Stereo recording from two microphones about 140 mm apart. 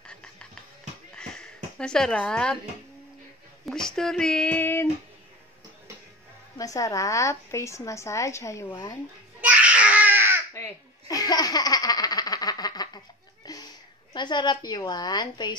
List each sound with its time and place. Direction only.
0.0 s a sound: 5° left (ahead or behind)
1.1 s bleat: 5° left (ahead or behind)
3.6 s speech: 5° left (ahead or behind)
6.6 s a woman's voice: 25° left (ahead or behind)
9.4 s baby cry: 10° right (ahead or behind)
10.5 s baby laughter: 20° left (ahead or behind)
13.4 s a sound: 25° left (ahead or behind)
14.1 s a woman's voice: 30° left (ahead or behind)